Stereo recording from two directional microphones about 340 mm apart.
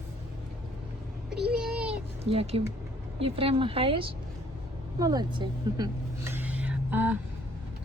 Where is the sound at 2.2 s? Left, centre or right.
Centre.